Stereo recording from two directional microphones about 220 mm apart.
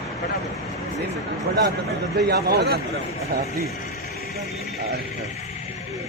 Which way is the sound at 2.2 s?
45° right (ahead or behind).